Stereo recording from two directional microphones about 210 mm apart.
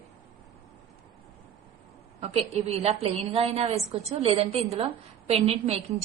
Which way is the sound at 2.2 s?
30° right (ahead or behind).